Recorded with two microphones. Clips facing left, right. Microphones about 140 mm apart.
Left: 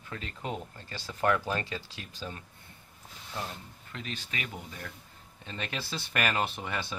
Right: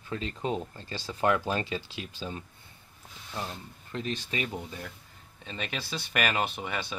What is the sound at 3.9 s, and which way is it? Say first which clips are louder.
Speech: right 6 dB; 25° right (ahead or behind).